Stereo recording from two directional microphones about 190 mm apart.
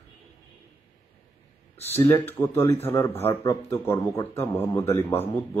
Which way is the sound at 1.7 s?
35° left (ahead or behind).